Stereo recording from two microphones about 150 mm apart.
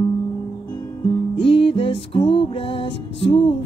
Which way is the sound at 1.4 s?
35° left (ahead or behind).